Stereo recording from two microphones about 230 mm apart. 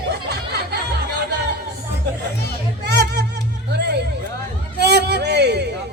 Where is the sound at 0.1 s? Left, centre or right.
Right.